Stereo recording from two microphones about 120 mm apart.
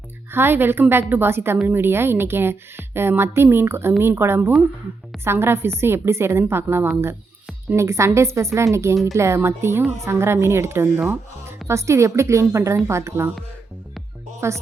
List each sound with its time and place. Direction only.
0.3 s a woman's voice: 20° right (ahead or behind)
14.4 s a woman's voice: 20° right (ahead or behind)